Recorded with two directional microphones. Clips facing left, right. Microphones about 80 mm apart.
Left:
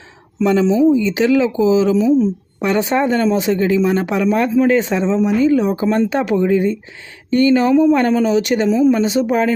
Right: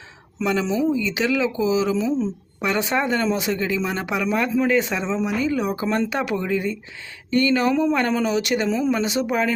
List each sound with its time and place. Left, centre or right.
0.3 s speech: left